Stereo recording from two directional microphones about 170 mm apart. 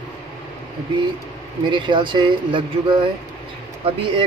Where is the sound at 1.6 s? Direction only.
30° right (ahead or behind).